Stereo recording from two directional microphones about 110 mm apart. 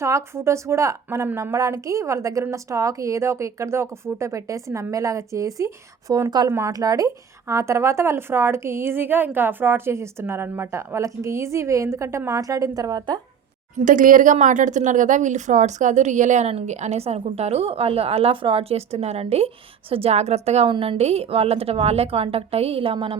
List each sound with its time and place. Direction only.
0.0 s speech: 25° right (ahead or behind)
6.5 s speech: 25° right (ahead or behind)
6.7 s speech: 35° right (ahead or behind)
14.3 s a woman's voice: 90° right
20.7 s a woman's voice: 55° right (ahead or behind)